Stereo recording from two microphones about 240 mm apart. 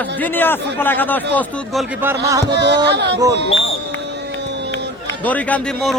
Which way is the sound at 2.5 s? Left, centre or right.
Right.